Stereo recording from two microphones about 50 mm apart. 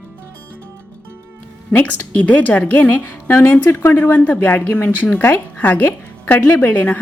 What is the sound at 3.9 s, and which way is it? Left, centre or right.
A woman's voice, left.